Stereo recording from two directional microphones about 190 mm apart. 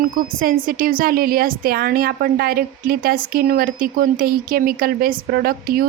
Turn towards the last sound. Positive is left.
turn(degrees=-50)  # may be behind; listen again after turning